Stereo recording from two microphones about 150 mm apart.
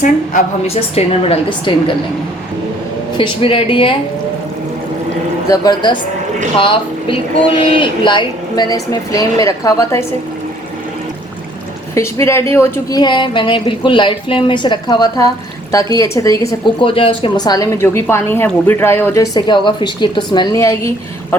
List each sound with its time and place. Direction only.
0.7 s a woman's voice: 40° left (ahead or behind)
3.2 s a woman's voice: 35° left (ahead or behind)
5.5 s a woman's voice: 30° left (ahead or behind)
11.9 s a woman's voice: 20° left (ahead or behind)
16.8 s a woman's voice: 35° left (ahead or behind); by 21.3 s 20° left (ahead or behind)